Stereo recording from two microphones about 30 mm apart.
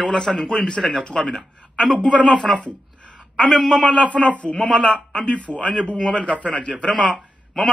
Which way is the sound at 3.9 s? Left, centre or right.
Left.